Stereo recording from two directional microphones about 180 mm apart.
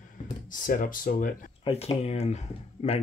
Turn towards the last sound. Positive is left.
turn(degrees=35)  # may be behind; listen again after turning